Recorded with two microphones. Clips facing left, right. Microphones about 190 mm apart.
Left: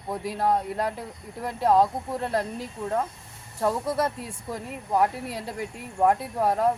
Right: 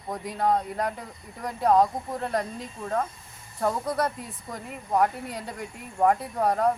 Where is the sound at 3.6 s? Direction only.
5° left (ahead or behind).